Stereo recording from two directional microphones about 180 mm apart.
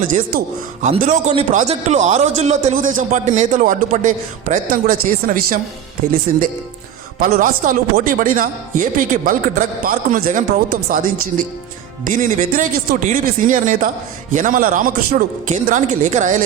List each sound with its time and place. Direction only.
0.1 s a man's voice: 40° right (ahead or behind)